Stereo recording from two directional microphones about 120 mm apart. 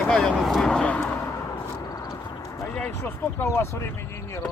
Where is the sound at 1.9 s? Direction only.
30° left (ahead or behind).